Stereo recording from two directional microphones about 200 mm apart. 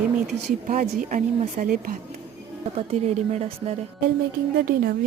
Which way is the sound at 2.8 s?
30° right (ahead or behind).